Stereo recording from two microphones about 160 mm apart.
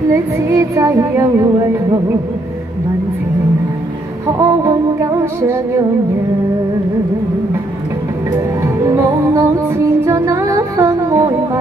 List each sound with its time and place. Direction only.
0.1 s child singing: 20° right (ahead or behind)
4.4 s music: 20° right (ahead or behind)
8.6 s music: 10° right (ahead or behind)